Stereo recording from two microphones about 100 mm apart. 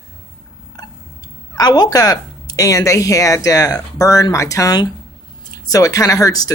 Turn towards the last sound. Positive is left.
turn(degrees=35)  # may be behind; listen again after turning